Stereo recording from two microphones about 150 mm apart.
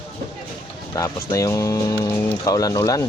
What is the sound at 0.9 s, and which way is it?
Speech, 25° left (ahead or behind).